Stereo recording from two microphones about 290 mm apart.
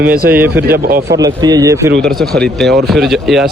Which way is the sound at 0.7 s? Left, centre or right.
Right.